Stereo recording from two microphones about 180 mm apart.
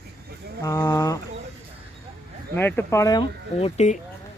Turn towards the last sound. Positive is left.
turn(degrees=40)  # may be behind; listen again after turning